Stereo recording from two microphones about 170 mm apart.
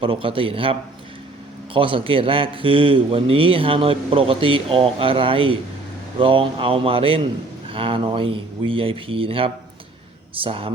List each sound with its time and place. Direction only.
0.0 s a man's voice: 30° right (ahead or behind)